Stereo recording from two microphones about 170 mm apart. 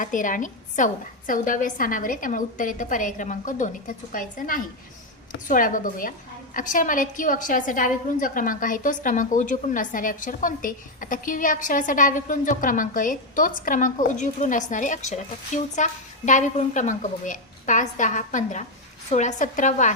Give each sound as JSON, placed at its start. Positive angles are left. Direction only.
{"t": 0.0, "sound": "a woman's voice", "side_deg": 50}